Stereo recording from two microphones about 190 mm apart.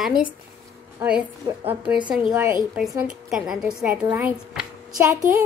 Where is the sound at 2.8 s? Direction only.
5° right (ahead or behind).